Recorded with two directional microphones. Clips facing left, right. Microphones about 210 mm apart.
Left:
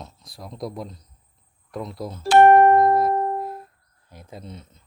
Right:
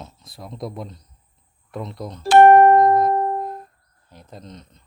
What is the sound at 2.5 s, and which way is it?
Music, 5° left (ahead or behind).